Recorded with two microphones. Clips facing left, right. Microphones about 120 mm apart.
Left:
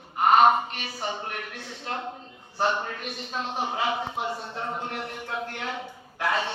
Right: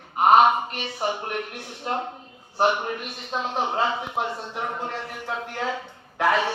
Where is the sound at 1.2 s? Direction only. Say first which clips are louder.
Right 5 dB; 50° right (ahead or behind).